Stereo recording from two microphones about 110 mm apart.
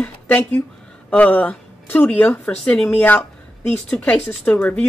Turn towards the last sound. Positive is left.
turn(degrees=15)  # may be behind; listen again after turning